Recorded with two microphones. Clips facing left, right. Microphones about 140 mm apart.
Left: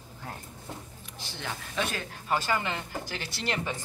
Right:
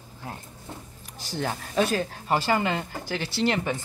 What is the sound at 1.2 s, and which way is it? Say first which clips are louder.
Speech: right 8 dB; 40° right (ahead or behind).